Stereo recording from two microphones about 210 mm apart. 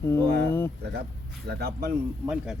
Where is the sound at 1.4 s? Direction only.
50° right (ahead or behind).